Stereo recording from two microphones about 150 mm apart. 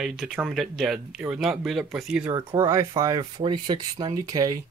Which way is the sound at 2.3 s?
25° right (ahead or behind).